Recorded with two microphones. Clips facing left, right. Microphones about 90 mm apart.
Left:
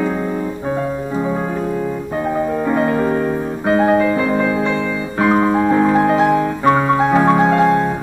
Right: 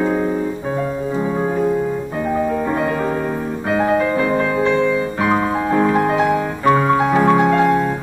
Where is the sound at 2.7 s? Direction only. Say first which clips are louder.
Left 3 dB; 25° left (ahead or behind).